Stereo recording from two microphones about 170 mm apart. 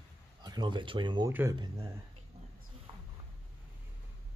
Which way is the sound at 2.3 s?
35° right (ahead or behind).